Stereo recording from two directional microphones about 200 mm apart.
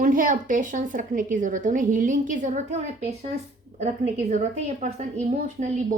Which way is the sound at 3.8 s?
35° right (ahead or behind).